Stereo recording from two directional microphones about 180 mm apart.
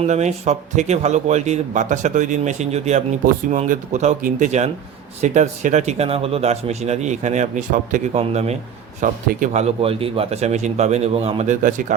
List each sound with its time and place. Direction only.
0.0 s speech: 40° right (ahead or behind)